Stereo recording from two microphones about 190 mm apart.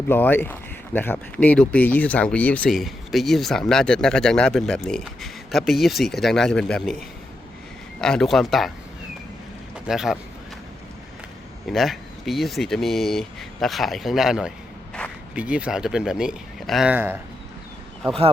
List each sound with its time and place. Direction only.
0.1 s speech: 10° left (ahead or behind)
8.0 s speech: centre (ahead or behind)
9.7 s speech: 5° right (ahead or behind)
11.6 s speech: centre (ahead or behind)